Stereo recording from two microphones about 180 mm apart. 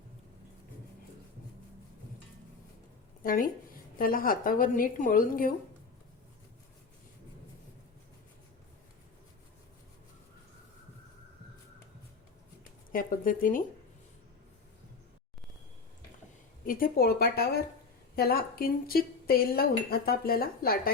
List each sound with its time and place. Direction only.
3.9 s a woman's voice: 50° left (ahead or behind)
12.9 s a woman's voice: 50° left (ahead or behind)
16.6 s speech: 50° left (ahead or behind)